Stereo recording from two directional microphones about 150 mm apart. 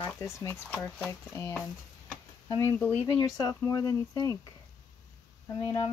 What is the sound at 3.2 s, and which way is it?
Speech, 25° left (ahead or behind).